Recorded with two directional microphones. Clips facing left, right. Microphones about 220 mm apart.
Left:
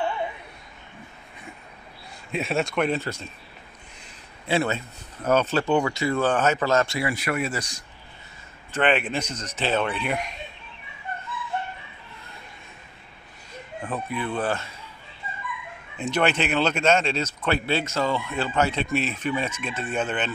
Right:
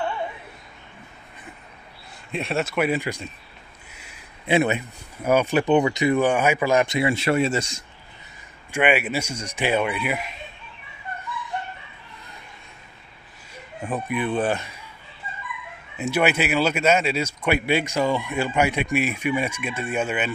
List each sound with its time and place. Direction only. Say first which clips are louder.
2.3 s speech: even; centre (ahead or behind); by 7.8 s 25° right (ahead or behind)
8.7 s speech: right 2 dB; 10° right (ahead or behind)
13.8 s speech: right 4 dB; 15° right (ahead or behind)
16.0 s speech: right 2 dB; 10° right (ahead or behind)